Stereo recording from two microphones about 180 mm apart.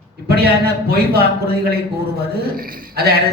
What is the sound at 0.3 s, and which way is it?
A man's voice, 60° right (ahead or behind).